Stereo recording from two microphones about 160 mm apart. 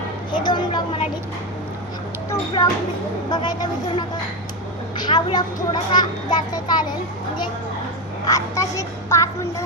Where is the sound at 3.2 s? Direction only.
25° left (ahead or behind).